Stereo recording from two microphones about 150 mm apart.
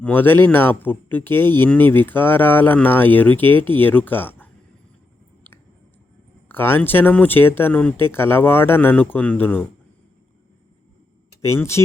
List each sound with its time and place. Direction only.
0.0 s speech: 15° left (ahead or behind)
6.5 s speech: 15° left (ahead or behind)
11.4 s speech: 15° left (ahead or behind)